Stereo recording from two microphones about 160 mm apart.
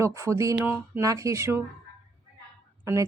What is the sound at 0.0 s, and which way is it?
Speech, 20° right (ahead or behind).